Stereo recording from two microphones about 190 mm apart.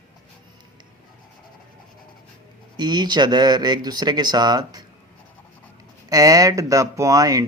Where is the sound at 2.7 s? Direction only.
20° right (ahead or behind).